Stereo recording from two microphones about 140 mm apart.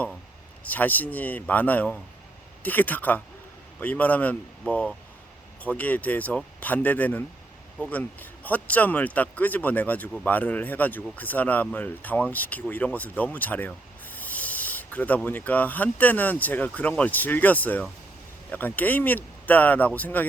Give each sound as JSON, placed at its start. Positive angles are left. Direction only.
{"t": 0.6, "sound": "speech", "side_deg": 10}